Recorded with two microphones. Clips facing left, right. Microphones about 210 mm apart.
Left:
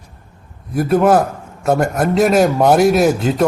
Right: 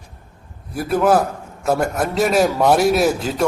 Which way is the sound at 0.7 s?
5° right (ahead or behind).